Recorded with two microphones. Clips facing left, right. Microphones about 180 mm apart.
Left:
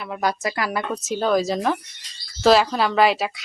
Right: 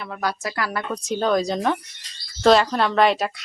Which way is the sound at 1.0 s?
5° left (ahead or behind).